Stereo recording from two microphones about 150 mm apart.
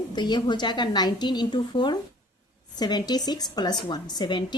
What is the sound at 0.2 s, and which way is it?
A woman's voice, 30° left (ahead or behind).